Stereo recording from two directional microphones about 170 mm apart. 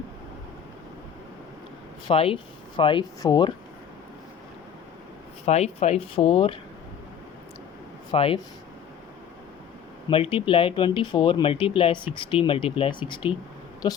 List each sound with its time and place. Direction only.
2.0 s speech: 35° left (ahead or behind)
5.5 s speech: 40° left (ahead or behind)
8.1 s speech: 35° left (ahead or behind)
10.1 s speech: 30° left (ahead or behind)